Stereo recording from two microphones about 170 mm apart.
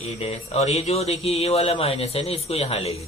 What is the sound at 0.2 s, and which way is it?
A man's voice, 35° left (ahead or behind).